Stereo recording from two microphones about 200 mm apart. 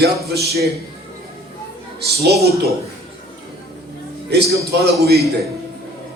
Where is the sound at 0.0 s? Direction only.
50° right (ahead or behind).